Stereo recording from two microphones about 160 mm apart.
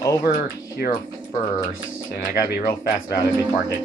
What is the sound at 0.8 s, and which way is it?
Speech, 70° left (ahead or behind).